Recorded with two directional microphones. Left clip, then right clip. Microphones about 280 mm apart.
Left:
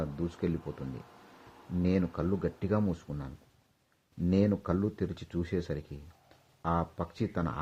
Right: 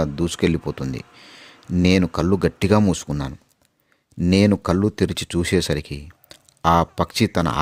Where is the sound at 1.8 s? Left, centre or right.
Right.